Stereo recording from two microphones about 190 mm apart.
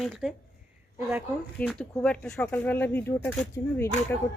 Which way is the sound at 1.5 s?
5° left (ahead or behind).